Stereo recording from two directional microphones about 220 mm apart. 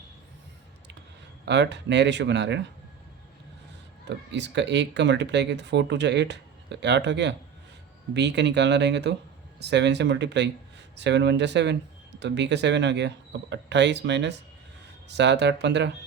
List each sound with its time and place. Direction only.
1.5 s speech: 50° right (ahead or behind)
4.1 s speech: 55° right (ahead or behind)